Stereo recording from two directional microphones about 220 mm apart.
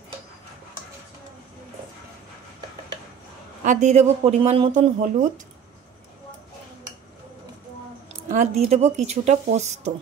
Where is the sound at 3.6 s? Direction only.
35° right (ahead or behind).